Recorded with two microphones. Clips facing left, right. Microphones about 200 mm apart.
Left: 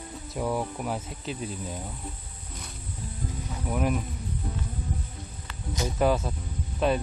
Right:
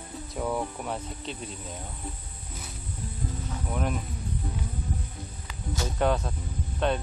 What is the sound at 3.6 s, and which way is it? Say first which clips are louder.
Speech: left 4 dB; 5° left (ahead or behind).